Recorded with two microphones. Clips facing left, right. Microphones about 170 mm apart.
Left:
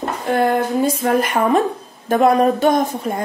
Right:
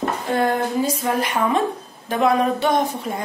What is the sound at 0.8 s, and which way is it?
A woman's voice, 50° left (ahead or behind).